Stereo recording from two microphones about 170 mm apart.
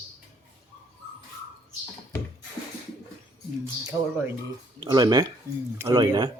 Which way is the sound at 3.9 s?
10° right (ahead or behind).